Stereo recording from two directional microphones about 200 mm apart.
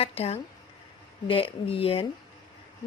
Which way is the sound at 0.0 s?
30° left (ahead or behind).